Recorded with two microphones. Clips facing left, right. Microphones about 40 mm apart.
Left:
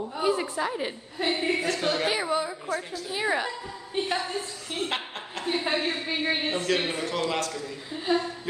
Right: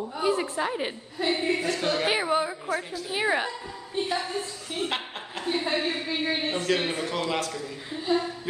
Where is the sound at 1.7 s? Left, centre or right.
Centre.